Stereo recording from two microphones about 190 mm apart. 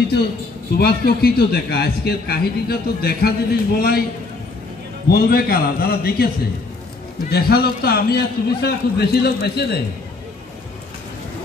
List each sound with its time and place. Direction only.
0.7 s a man's voice: 55° left (ahead or behind)
5.0 s a man's voice: 55° left (ahead or behind)